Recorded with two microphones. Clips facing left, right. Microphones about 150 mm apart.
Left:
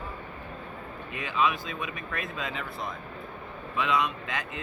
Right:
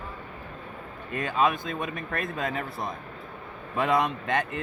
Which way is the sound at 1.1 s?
45° right (ahead or behind).